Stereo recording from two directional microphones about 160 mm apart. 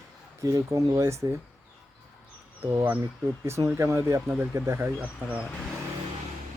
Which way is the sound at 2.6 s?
15° right (ahead or behind).